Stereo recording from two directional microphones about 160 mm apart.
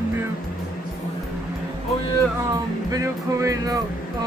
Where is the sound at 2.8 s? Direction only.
20° right (ahead or behind).